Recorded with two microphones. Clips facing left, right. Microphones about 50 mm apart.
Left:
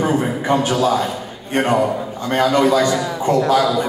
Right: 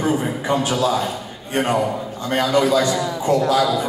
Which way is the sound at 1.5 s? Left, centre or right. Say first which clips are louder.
Left 3 dB; left.